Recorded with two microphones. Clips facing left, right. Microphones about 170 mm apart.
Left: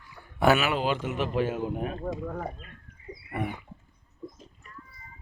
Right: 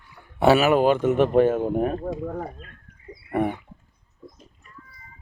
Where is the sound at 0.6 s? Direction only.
50° right (ahead or behind).